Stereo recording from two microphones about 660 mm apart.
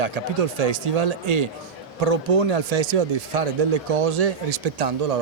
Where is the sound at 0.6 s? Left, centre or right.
Right.